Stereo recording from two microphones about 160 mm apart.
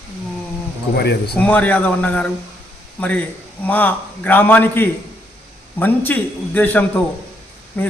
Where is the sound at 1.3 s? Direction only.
10° left (ahead or behind).